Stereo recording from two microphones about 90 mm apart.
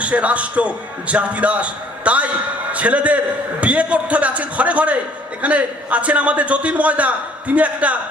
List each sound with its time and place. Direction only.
0.0 s a man's voice: 15° right (ahead or behind)